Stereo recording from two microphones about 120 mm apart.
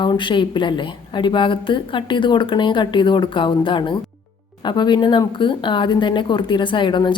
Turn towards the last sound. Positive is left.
turn(degrees=40)  # may be behind; listen again after turning